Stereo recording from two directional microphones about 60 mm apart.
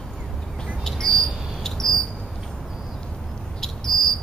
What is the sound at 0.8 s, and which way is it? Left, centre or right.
Cricket, centre.